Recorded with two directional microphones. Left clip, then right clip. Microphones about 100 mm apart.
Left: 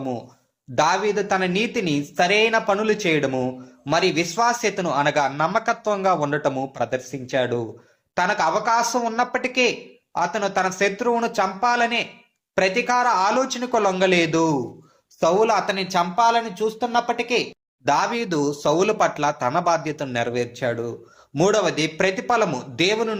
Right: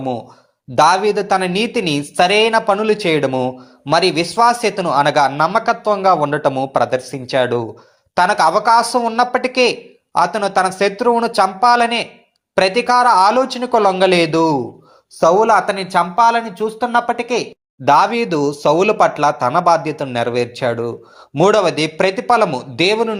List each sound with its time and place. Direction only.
0.8 s a woman's voice: 35° right (ahead or behind); by 3.9 s 20° right (ahead or behind)
3.9 s a woman's voice: 30° right (ahead or behind)
15.2 s speech: 40° right (ahead or behind)